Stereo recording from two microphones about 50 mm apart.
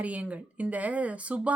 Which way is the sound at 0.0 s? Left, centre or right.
Right.